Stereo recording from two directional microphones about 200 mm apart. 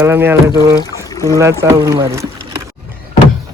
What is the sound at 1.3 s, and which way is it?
Speech, 15° right (ahead or behind).